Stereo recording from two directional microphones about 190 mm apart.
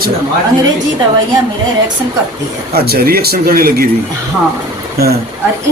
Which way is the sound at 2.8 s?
55° right (ahead or behind).